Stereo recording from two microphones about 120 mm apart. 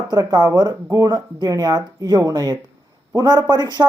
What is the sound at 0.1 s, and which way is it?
Speech, 35° right (ahead or behind).